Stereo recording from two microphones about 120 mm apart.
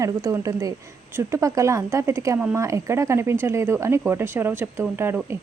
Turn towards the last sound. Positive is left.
turn(degrees=-20)  # may be behind; listen again after turning